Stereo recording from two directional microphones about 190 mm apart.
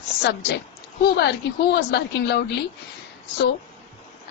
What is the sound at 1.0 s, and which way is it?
A woman's voice, 60° left (ahead or behind).